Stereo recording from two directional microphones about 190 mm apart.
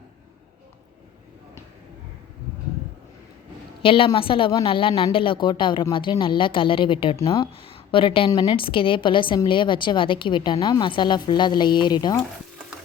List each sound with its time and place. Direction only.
3.8 s a woman's voice: 30° left (ahead or behind)